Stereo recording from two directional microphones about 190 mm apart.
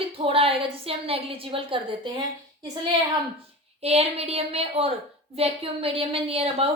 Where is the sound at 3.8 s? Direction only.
30° right (ahead or behind).